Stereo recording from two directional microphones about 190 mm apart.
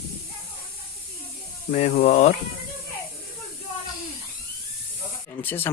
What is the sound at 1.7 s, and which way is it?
Speech, 45° left (ahead or behind).